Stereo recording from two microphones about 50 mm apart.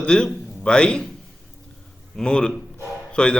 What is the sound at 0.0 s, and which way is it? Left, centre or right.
A man's voice, centre.